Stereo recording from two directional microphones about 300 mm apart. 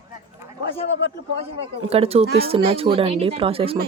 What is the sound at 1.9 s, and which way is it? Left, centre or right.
A woman's voice, centre.